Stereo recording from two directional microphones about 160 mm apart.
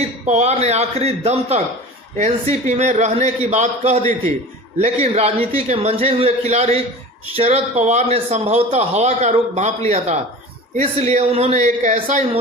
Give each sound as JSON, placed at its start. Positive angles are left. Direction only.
{"t": 0.0, "sound": "a man's voice", "side_deg": -40}
{"t": 2.6, "sound": "a man's voice", "side_deg": -45}